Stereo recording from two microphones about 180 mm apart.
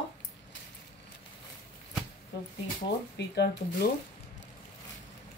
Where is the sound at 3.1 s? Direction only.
70° left (ahead or behind).